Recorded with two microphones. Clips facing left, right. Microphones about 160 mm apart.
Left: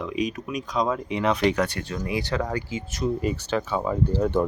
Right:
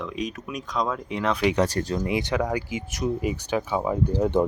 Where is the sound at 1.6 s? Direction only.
35° right (ahead or behind).